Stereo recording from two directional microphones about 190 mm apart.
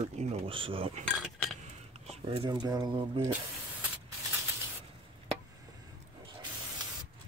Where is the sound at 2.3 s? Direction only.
25° right (ahead or behind).